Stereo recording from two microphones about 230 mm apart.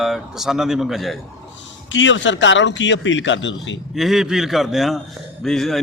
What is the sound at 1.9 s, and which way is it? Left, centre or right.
A man's voice, left.